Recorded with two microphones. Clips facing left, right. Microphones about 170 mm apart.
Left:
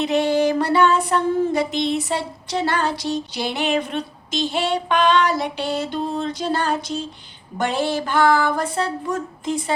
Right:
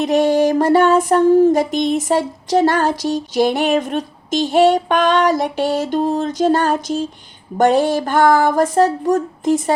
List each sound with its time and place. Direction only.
0.0 s music: 45° right (ahead or behind)